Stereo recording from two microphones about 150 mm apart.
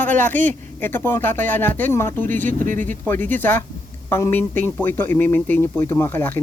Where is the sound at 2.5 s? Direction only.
60° right (ahead or behind).